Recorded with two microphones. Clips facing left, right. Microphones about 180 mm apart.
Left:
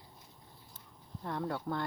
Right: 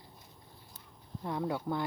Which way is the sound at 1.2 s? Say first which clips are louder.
Right 2 dB; 10° right (ahead or behind).